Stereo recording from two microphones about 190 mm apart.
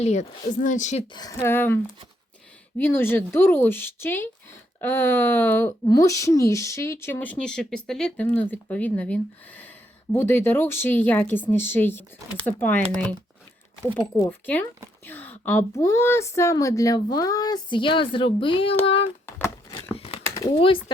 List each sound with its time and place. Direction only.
0.0 s speech: 40° left (ahead or behind)
1.1 s speech: 20° left (ahead or behind)
19.9 s a sound: 30° left (ahead or behind)
20.5 s speech: 30° left (ahead or behind)